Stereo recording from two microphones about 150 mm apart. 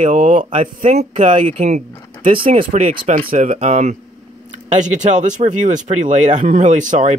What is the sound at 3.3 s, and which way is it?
Speech, 55° right (ahead or behind).